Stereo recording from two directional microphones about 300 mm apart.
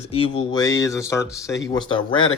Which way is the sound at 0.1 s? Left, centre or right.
Centre.